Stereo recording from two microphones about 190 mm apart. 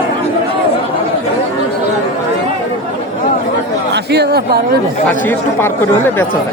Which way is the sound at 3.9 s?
60° right (ahead or behind).